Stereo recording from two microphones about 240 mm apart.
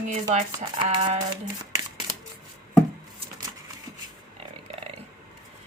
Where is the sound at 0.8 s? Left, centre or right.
Right.